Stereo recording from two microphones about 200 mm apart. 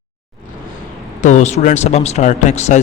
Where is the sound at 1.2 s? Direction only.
35° left (ahead or behind).